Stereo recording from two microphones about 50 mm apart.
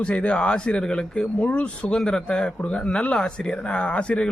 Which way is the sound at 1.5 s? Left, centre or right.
Left.